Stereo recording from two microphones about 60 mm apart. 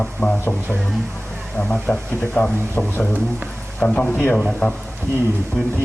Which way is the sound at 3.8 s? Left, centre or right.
Left.